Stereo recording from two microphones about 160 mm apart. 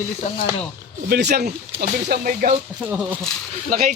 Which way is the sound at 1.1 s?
85° right.